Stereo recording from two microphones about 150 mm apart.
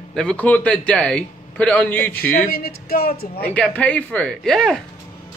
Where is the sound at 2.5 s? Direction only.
90° left.